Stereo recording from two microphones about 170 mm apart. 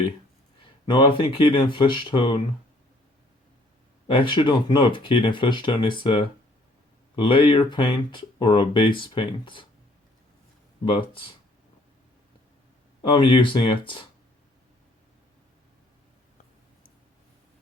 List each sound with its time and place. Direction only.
0.6 s speech: 30° left (ahead or behind)
4.0 s speech: 30° left (ahead or behind)
10.9 s speech: 30° left (ahead or behind)
13.0 s speech: 30° left (ahead or behind)